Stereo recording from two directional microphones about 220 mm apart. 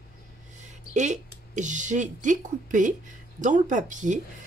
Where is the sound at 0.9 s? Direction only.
30° right (ahead or behind).